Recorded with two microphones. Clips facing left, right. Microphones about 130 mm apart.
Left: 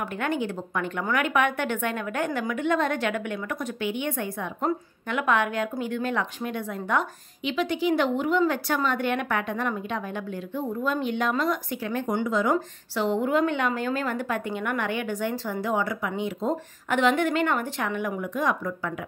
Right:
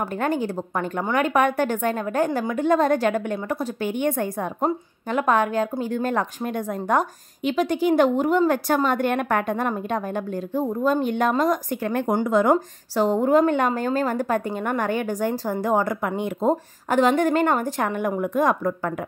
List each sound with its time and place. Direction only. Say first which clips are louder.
0.0 s a woman's voice: right 4 dB; 35° right (ahead or behind)